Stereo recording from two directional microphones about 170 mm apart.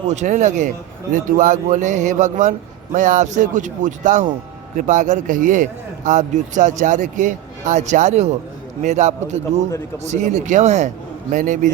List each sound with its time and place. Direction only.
0.1 s a man's voice: 45° right (ahead or behind)